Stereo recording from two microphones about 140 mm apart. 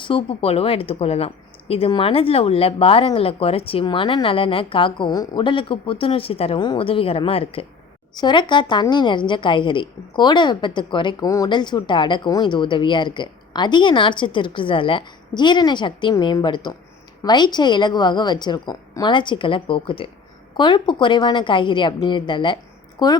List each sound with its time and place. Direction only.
0.0 s a woman's voice: 40° left (ahead or behind)
8.1 s a woman's voice: 30° left (ahead or behind)